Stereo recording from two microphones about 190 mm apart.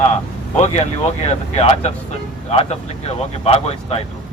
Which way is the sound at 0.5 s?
35° left (ahead or behind).